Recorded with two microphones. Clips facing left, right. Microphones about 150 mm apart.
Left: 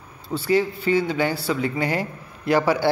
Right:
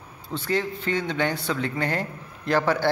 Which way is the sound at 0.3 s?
10° left (ahead or behind).